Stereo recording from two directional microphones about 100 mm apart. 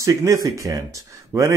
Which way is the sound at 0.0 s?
35° right (ahead or behind).